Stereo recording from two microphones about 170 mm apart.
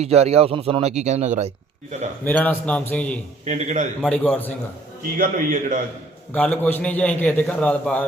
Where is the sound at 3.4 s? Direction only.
40° right (ahead or behind).